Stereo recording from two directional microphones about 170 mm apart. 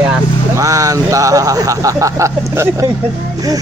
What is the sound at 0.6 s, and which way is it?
Speech, 20° right (ahead or behind).